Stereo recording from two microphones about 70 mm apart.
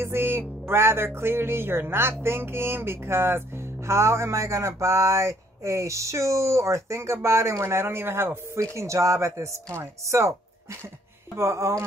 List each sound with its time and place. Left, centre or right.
0.0 s speech: right